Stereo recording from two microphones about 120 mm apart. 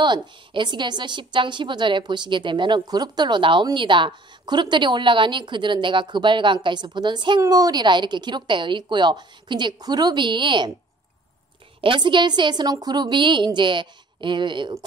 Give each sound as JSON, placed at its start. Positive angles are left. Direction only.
{"t": 0.0, "sound": "a woman's voice", "side_deg": -40}
{"t": 11.8, "sound": "a woman's voice", "side_deg": -45}